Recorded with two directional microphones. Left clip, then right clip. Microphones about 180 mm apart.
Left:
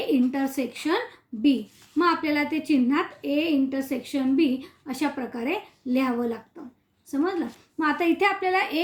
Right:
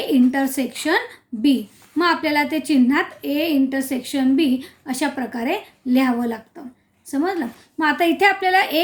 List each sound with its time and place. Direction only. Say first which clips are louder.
0.1 s a woman's voice: right 7 dB; 35° right (ahead or behind)